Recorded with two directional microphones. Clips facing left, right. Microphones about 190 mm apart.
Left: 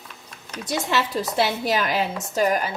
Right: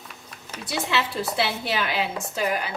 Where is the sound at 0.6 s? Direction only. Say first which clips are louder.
Left 2 dB; 40° left (ahead or behind).